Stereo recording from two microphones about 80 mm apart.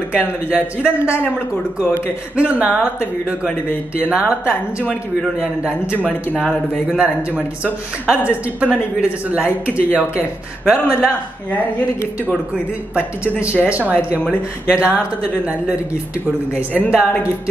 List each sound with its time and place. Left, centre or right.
0.5 s speech: centre
2.3 s speech: centre
7.0 s speech: centre
13.4 s speech: centre